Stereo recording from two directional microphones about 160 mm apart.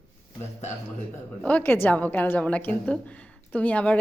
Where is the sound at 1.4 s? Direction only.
10° left (ahead or behind).